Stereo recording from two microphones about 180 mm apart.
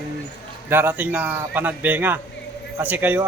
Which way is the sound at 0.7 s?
10° right (ahead or behind).